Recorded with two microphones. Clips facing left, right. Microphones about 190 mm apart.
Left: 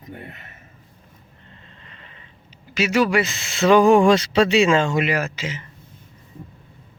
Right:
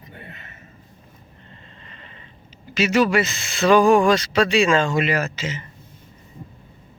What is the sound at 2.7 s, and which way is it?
Speech, 10° left (ahead or behind).